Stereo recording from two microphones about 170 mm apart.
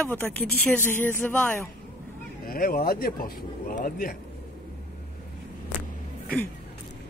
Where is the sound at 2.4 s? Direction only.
55° left (ahead or behind).